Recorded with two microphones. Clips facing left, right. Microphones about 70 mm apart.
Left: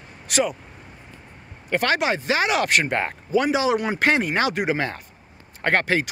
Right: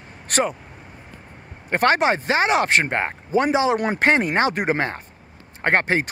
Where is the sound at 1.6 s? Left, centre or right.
Right.